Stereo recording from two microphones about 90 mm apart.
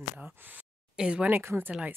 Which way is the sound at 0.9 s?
10° right (ahead or behind).